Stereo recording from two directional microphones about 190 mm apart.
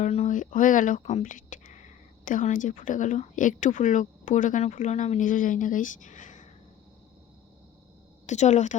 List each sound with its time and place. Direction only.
0.0 s speech: 35° left (ahead or behind)
8.3 s speech: 40° left (ahead or behind)